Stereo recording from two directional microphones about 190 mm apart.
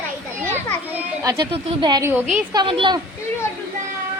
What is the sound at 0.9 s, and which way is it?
Children playing, 15° right (ahead or behind).